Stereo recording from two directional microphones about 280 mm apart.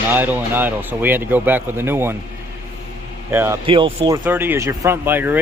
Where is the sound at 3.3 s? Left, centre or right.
Centre.